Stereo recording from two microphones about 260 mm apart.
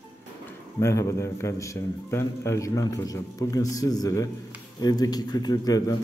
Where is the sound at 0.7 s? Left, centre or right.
Centre.